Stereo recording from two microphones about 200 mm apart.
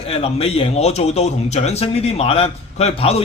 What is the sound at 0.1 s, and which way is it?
A man's voice, 30° left (ahead or behind).